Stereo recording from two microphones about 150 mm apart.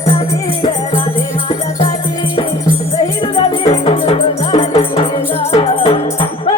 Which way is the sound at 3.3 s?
40° left (ahead or behind).